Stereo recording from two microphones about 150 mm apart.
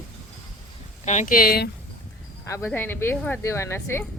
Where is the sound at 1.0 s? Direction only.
50° left (ahead or behind); by 1.7 s 85° left.